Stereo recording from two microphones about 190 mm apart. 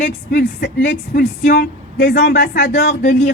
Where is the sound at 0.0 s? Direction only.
55° left (ahead or behind).